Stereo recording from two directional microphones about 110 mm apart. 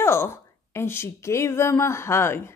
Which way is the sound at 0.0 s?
20° left (ahead or behind).